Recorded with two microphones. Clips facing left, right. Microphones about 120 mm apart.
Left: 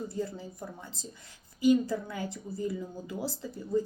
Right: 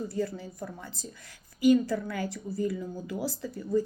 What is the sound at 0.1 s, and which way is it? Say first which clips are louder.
Speech: right 3 dB; 20° left (ahead or behind).